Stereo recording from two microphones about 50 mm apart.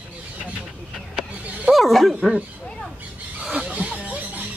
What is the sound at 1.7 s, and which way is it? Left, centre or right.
Speech, centre.